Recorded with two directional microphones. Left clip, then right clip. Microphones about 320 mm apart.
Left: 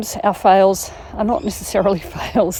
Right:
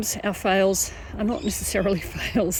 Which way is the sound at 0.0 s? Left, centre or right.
Centre.